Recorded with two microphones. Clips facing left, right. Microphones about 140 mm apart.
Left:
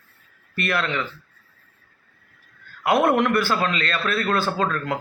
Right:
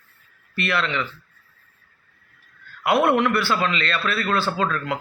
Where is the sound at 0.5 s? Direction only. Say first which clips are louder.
Even; 45° left (ahead or behind).